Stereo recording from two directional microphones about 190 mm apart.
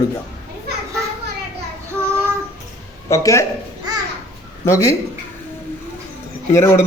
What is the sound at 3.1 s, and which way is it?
Speech, 15° left (ahead or behind).